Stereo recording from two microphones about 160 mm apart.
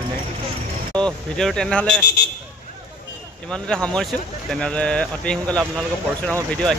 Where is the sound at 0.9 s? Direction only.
5° left (ahead or behind).